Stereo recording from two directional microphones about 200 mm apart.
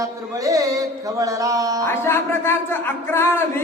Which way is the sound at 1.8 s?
10° left (ahead or behind).